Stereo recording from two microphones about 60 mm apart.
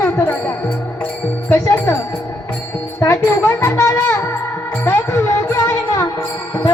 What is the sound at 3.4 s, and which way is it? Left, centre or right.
Music, left.